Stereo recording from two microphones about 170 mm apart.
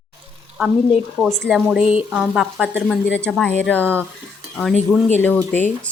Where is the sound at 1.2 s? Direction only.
5° right (ahead or behind).